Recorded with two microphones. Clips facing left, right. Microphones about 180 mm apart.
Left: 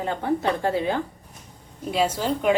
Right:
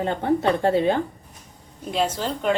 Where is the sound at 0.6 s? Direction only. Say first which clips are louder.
Right 4 dB; 30° right (ahead or behind).